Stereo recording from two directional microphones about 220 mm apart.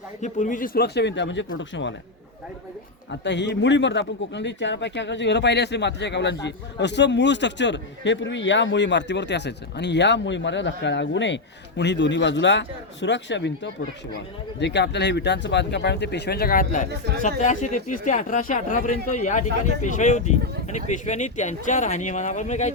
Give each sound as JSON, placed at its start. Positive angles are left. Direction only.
{"t": 0.2, "sound": "speech", "side_deg": 35}
{"t": 3.2, "sound": "speech", "side_deg": 50}